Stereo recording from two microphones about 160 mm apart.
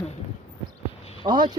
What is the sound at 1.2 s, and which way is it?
Speech, 30° right (ahead or behind).